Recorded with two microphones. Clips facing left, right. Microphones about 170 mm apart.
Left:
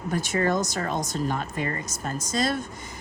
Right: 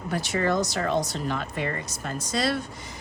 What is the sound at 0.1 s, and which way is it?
Speech, 45° left (ahead or behind).